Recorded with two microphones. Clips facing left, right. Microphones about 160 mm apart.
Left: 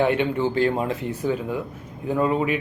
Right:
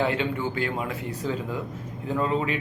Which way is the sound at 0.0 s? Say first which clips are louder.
Left 5 dB; 20° left (ahead or behind).